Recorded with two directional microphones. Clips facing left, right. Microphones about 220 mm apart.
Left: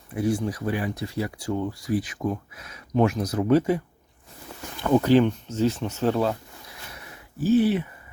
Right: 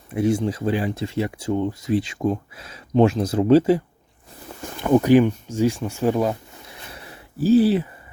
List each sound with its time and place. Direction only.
0.1 s speech: 25° right (ahead or behind)
4.8 s speech: 15° right (ahead or behind)
6.7 s a sound: 30° right (ahead or behind)